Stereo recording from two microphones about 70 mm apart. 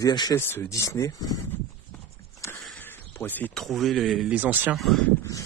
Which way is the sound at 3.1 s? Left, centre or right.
Left.